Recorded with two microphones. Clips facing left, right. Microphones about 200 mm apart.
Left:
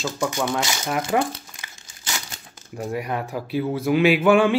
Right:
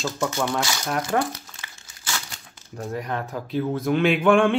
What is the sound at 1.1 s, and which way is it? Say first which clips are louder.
Crumpling: left 2 dB; 20° left (ahead or behind).